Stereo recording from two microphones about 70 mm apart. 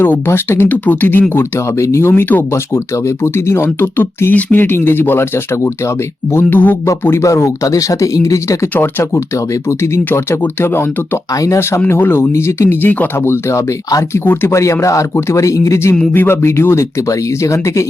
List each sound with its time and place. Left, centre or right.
0.0 s speech: left
1.3 s speech: left
6.3 s speech: left
7.2 s speech: left
8.7 s speech: left
9.1 s speech: left
11.3 s speech: left
11.9 s speech: left
13.1 s speech: left
16.1 s speech: left